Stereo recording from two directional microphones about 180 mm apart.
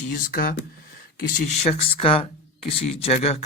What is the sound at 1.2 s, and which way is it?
Speech, 45° left (ahead or behind).